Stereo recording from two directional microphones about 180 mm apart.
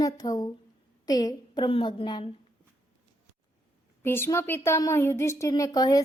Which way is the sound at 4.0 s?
15° left (ahead or behind).